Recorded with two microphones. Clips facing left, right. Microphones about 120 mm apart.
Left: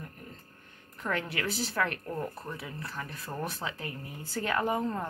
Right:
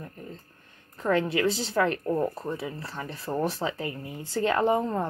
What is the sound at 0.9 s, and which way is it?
Speech, 30° right (ahead or behind).